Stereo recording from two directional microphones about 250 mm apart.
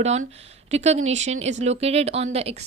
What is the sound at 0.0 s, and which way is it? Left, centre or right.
Speech, right.